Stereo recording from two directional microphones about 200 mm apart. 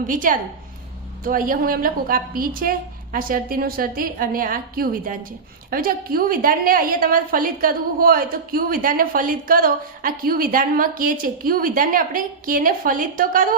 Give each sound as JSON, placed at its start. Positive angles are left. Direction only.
{"t": 0.1, "sound": "a woman's voice", "side_deg": -40}